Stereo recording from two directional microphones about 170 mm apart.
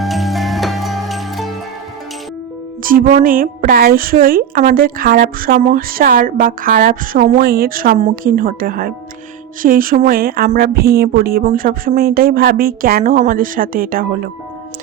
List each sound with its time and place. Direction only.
0.0 s music: centre (ahead or behind)
2.8 s a woman's voice: 55° right (ahead or behind)